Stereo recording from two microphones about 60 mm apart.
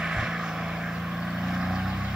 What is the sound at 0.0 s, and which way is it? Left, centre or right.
Vehicle, centre.